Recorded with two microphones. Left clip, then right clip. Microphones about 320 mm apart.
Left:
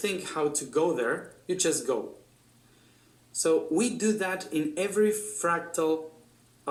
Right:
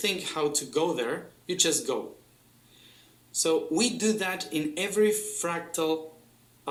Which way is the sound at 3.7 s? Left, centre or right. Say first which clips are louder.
Right 1 dB; centre.